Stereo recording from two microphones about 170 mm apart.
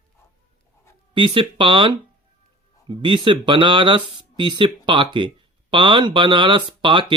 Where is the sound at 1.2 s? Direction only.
30° right (ahead or behind).